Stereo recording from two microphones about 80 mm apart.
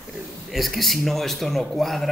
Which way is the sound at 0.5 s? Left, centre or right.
Centre.